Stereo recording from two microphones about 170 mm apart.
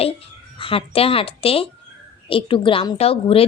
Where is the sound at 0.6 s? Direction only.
30° left (ahead or behind).